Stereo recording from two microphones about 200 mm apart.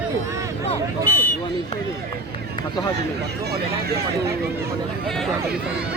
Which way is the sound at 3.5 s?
55° right (ahead or behind).